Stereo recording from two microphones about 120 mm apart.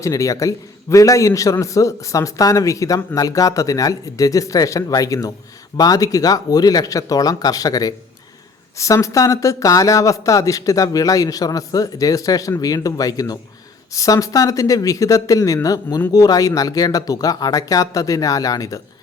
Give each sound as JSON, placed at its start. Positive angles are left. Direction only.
{"t": 0.0, "sound": "a man's voice", "side_deg": 25}